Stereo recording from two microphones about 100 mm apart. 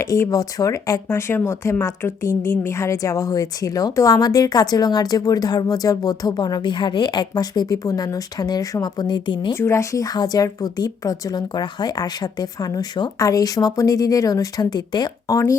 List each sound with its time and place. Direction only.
0.0 s a woman's voice: 30° left (ahead or behind)
1.0 s a woman's voice: 25° left (ahead or behind); by 9.6 s 55° left (ahead or behind)
9.6 s a woman's voice: 30° left (ahead or behind); by 15.4 s 45° left (ahead or behind)